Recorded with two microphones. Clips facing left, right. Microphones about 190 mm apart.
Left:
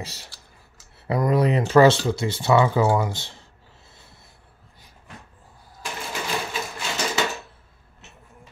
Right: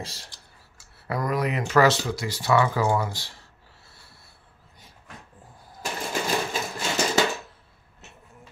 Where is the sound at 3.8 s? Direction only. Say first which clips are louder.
Left 3 dB; 20° left (ahead or behind).